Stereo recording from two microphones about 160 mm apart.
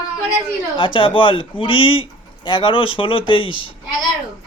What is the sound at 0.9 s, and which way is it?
Speech, 30° left (ahead or behind).